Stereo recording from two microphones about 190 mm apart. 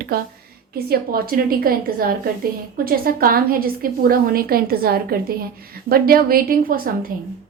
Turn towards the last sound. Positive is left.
turn(degrees=-50)  # may be behind; listen again after turning